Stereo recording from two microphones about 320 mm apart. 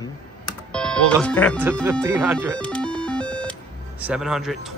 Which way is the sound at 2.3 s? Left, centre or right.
Centre.